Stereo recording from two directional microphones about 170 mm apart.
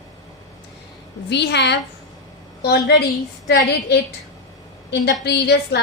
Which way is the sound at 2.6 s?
70° left (ahead or behind).